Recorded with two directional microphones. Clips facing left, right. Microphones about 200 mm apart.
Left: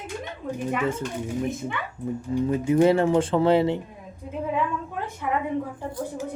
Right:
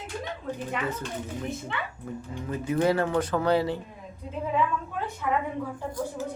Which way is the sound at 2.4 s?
20° left (ahead or behind).